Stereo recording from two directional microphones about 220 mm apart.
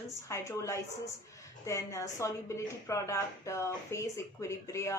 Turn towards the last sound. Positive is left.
turn(degrees=15)  # may be behind; listen again after turning